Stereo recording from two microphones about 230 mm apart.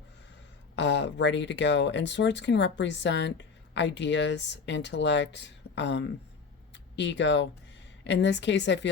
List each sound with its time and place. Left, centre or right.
0.8 s speech: left